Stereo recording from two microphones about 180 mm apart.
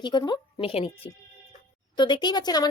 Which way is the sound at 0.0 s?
25° left (ahead or behind).